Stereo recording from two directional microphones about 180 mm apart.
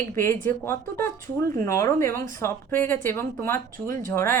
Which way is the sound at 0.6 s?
15° left (ahead or behind).